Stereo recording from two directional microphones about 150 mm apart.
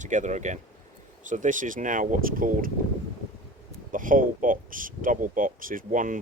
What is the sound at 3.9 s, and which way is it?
Speech, 65° right (ahead or behind).